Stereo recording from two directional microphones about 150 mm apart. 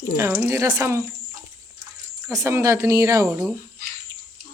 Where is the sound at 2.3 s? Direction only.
20° right (ahead or behind).